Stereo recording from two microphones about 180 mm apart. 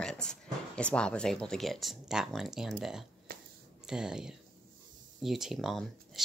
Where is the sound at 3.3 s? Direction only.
55° right (ahead or behind).